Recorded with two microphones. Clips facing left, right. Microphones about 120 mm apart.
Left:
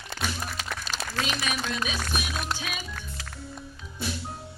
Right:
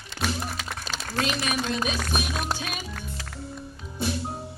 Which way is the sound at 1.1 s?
45° right (ahead or behind).